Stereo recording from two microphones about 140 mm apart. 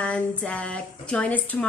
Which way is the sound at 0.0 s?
10° left (ahead or behind).